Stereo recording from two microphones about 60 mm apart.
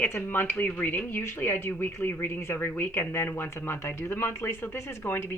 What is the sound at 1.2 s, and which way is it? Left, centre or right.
A woman's voice, left.